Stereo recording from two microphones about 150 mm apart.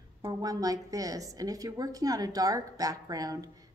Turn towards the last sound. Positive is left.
turn(degrees=-25)  # may be behind; listen again after turning